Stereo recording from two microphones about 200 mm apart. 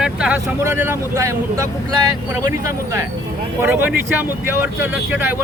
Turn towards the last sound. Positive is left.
turn(degrees=-10)  # may be behind; listen again after turning